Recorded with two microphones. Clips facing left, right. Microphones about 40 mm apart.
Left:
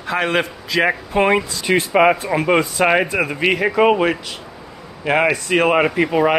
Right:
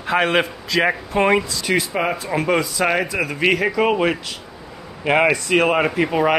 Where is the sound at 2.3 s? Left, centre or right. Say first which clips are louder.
Left 3 dB; centre.